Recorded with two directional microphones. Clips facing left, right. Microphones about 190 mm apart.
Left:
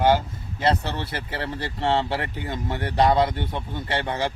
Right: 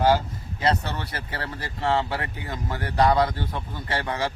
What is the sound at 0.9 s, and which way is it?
Speech, 30° left (ahead or behind).